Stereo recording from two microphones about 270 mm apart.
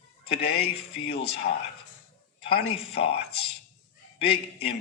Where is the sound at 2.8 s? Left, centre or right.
Left.